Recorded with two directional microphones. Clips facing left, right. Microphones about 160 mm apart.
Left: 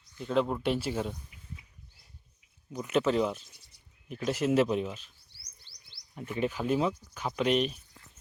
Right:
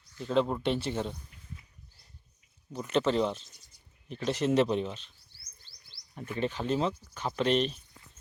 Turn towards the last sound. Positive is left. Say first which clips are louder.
# even
turn(degrees=10)  # may be behind; listen again after turning